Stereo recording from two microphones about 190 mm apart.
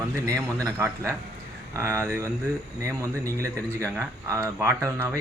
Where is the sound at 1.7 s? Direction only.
15° right (ahead or behind).